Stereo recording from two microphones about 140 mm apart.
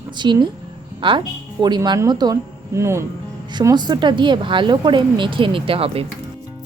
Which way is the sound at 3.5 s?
30° right (ahead or behind).